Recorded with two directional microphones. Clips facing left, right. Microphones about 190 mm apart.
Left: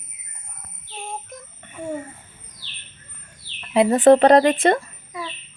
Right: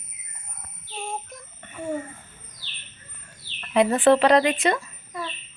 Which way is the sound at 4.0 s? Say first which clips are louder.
Left 6 dB; 45° left (ahead or behind).